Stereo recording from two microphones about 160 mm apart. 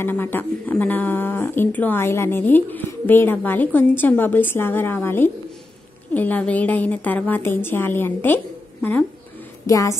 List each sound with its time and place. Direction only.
0.0 s speech: 15° left (ahead or behind)
9.7 s a woman's voice: 20° left (ahead or behind)